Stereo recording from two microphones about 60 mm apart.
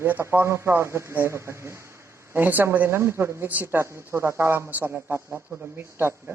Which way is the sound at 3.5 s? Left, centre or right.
Right.